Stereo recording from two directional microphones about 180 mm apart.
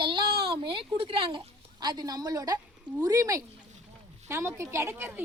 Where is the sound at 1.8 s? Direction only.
25° right (ahead or behind).